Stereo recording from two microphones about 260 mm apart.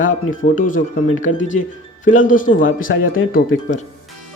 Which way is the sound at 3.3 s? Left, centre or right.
Left.